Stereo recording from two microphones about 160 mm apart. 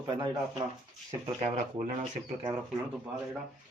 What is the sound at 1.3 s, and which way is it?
Speech, 55° right (ahead or behind).